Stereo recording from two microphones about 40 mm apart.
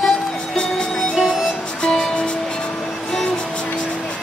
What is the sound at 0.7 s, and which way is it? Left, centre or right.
Music, centre.